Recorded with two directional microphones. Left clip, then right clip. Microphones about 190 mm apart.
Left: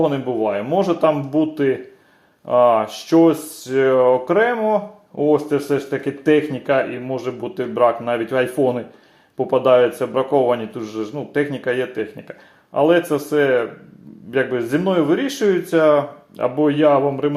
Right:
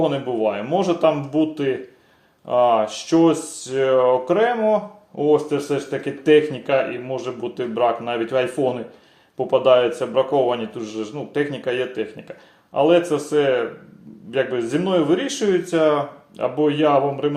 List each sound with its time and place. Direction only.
0.0 s speech: 40° left (ahead or behind)